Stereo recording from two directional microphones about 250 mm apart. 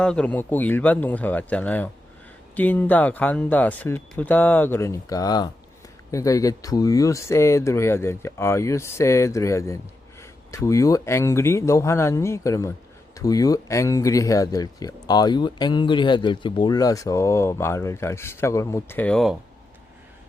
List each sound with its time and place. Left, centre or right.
0.0 s speech: centre